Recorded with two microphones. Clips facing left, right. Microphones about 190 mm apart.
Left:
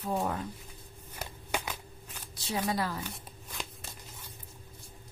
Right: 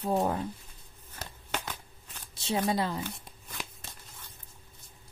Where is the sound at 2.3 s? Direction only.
25° right (ahead or behind).